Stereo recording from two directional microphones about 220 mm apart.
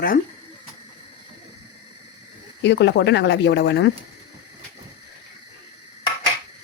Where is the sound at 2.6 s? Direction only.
50° left (ahead or behind).